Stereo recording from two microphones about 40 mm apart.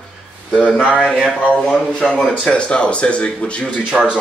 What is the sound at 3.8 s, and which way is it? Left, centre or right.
Speech, right.